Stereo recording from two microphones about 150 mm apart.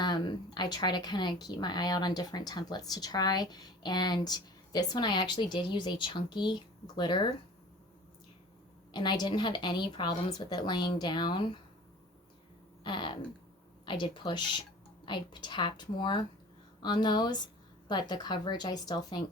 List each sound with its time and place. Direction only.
0.0 s speech: 30° left (ahead or behind)
8.9 s speech: 30° left (ahead or behind)
12.8 s a woman's voice: 30° left (ahead or behind)